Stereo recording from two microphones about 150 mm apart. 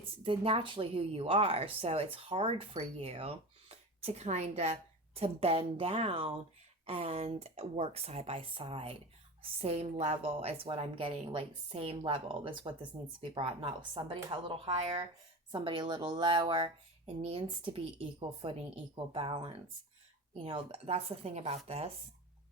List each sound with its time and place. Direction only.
0.0 s speech: 40° right (ahead or behind)